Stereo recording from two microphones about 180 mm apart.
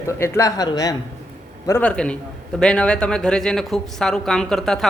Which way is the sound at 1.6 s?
10° left (ahead or behind).